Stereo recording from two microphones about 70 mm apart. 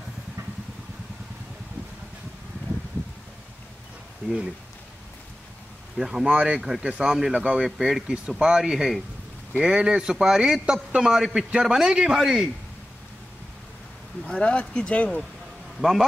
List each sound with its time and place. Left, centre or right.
4.2 s speech: centre
5.9 s a man's voice: centre
14.2 s speech: centre
15.8 s speech: centre